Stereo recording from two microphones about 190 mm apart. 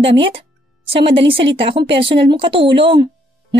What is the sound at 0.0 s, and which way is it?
A woman's voice, 30° right (ahead or behind).